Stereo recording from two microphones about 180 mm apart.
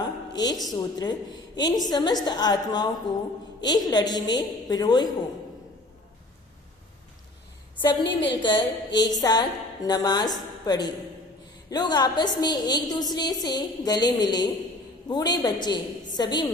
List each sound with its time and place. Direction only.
0.0 s a woman's voice: 20° left (ahead or behind)
7.8 s a woman's voice: 25° left (ahead or behind)